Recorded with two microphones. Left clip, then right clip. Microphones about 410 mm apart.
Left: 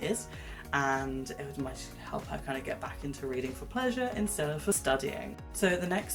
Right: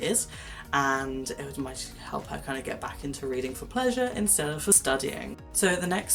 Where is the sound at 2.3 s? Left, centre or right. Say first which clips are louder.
Right 2 dB; left.